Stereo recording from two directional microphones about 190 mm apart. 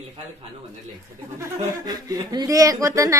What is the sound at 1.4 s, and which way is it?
A woman's voice, 20° right (ahead or behind).